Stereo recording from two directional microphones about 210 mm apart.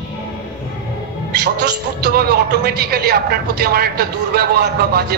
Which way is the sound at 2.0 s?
50° right (ahead or behind).